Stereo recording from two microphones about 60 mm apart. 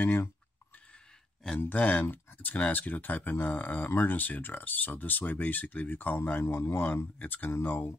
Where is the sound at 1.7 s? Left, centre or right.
Left.